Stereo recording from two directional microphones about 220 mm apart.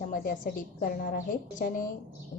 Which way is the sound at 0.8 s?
40° left (ahead or behind).